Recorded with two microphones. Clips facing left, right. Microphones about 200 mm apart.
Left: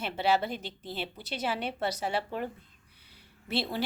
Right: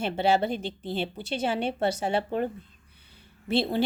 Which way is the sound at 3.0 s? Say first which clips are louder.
Right 8 dB; 25° right (ahead or behind).